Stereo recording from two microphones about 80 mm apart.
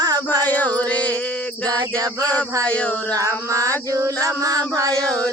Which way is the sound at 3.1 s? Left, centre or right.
Right.